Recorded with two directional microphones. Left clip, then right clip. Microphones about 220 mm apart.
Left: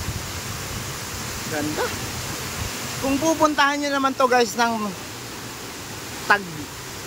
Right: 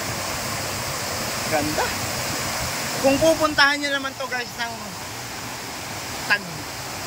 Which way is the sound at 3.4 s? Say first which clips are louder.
Even; 10° left (ahead or behind).